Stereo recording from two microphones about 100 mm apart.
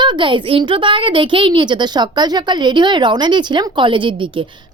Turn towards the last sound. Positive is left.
turn(degrees=-55)  # may be behind; listen again after turning